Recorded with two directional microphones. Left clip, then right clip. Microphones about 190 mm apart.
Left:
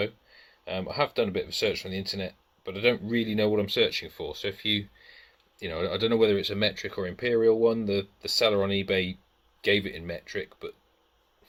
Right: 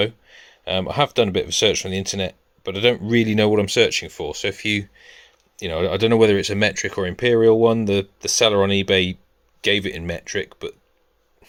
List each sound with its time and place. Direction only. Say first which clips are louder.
0.0 s speech: right 9 dB; 55° right (ahead or behind)